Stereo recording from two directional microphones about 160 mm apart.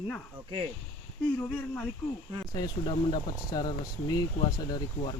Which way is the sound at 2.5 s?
25° left (ahead or behind).